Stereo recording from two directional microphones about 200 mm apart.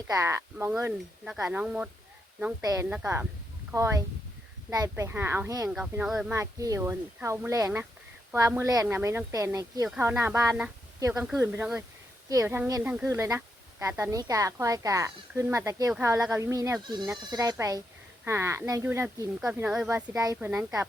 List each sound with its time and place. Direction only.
0.1 s speech: 15° right (ahead or behind)
5.7 s speech: 5° right (ahead or behind)
6.3 s speech: 15° right (ahead or behind)
19.9 s speech: 15° right (ahead or behind)